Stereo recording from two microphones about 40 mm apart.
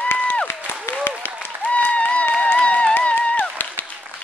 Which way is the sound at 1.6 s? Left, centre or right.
Left.